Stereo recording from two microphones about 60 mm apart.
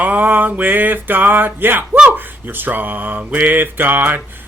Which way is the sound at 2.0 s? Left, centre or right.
Right.